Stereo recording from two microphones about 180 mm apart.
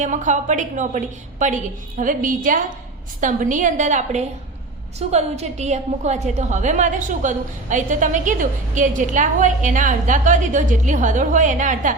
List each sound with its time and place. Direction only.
0.0 s a woman's voice: 45° right (ahead or behind)